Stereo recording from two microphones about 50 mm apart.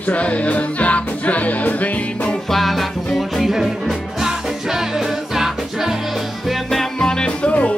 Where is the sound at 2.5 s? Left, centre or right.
Centre.